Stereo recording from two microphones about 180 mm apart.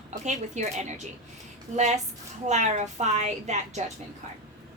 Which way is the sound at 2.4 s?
40° right (ahead or behind).